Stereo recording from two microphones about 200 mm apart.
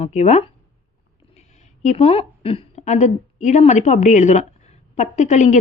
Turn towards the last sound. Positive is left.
turn(degrees=35)  # may be behind; listen again after turning